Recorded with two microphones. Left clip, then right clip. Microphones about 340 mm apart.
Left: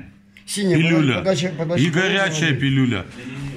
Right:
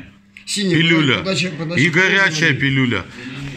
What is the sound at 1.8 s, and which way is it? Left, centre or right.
Speech, centre.